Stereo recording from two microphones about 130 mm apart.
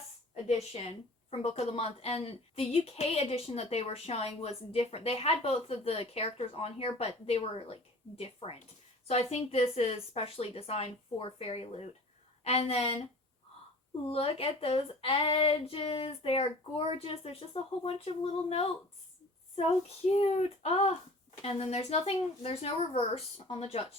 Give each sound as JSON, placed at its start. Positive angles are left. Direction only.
{"t": 0.4, "sound": "a woman's voice", "side_deg": 50}
{"t": 14.1, "sound": "a woman's voice", "side_deg": 50}
{"t": 20.1, "sound": "a woman's voice", "side_deg": 50}